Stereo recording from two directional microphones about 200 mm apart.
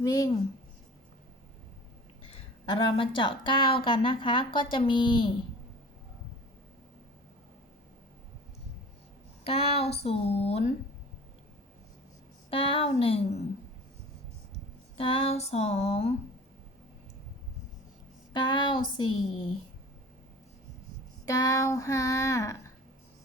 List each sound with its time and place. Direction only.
0.0 s child singing: 20° left (ahead or behind)
2.3 s speech: 25° left (ahead or behind)
9.4 s speech: 30° left (ahead or behind)
12.5 s speech: 25° left (ahead or behind)
14.5 s speech: 25° left (ahead or behind)
18.3 s speech: 25° left (ahead or behind)
21.2 s child singing: 15° left (ahead or behind)